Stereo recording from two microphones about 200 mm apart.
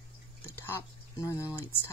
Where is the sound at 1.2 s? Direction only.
10° left (ahead or behind).